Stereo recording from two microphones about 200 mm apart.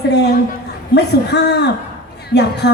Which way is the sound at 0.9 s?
55° left (ahead or behind).